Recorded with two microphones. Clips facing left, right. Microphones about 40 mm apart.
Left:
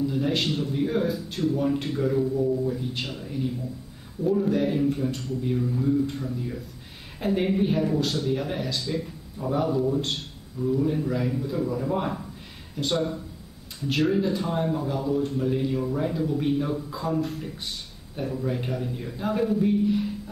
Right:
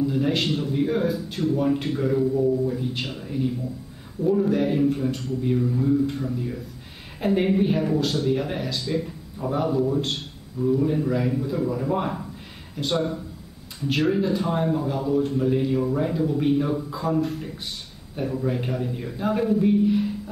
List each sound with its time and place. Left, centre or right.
0.0 s speech: centre